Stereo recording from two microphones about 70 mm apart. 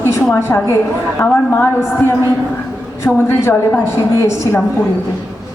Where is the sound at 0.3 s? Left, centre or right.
Left.